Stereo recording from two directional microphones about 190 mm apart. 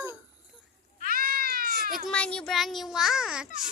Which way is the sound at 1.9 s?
5° left (ahead or behind).